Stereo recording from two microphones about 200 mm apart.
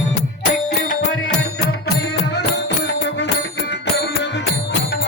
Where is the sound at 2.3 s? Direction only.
55° left (ahead or behind).